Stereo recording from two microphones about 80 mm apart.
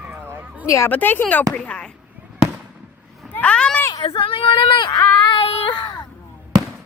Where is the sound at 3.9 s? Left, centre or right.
Left.